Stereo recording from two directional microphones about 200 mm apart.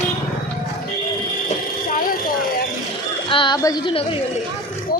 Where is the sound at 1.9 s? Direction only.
45° left (ahead or behind).